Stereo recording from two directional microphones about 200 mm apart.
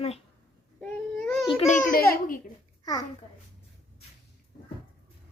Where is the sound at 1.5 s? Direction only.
35° left (ahead or behind).